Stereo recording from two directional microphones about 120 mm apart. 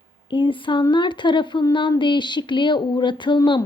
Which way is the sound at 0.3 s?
45° left (ahead or behind).